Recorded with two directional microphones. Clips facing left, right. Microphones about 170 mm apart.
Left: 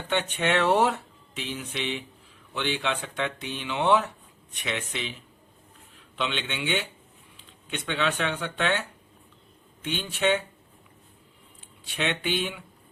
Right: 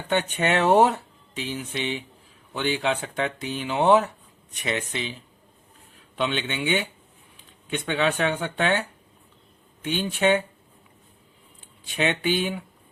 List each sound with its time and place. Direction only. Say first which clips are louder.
0.1 s speech: right 2 dB; 45° right (ahead or behind)
6.1 s speech: right 4 dB; 45° right (ahead or behind)
9.9 s speech: right 4 dB; 45° right (ahead or behind)
11.9 s speech: right 4 dB; 45° right (ahead or behind)